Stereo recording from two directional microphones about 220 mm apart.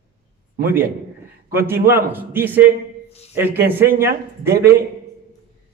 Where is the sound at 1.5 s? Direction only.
10° right (ahead or behind).